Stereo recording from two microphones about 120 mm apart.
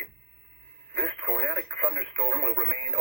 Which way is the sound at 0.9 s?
10° left (ahead or behind).